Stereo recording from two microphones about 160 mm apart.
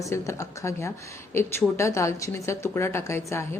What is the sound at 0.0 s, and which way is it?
A woman's voice, 20° left (ahead or behind).